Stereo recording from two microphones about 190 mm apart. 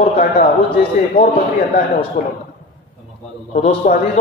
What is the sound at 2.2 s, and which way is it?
Speech, 55° left (ahead or behind).